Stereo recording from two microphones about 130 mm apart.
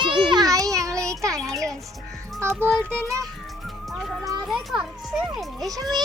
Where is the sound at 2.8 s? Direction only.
10° left (ahead or behind).